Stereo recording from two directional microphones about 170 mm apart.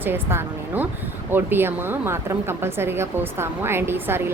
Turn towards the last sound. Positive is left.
turn(degrees=-15)  # may be behind; listen again after turning